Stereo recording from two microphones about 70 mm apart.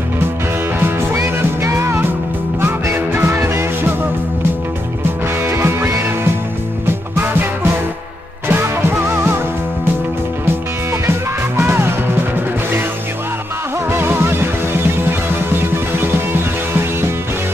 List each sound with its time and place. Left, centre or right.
1.1 s music: right
5.4 s music: right
8.5 s music: right
10.9 s music: right
13.8 s music: right